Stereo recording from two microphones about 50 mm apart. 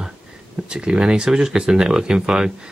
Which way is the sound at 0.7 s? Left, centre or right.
Centre.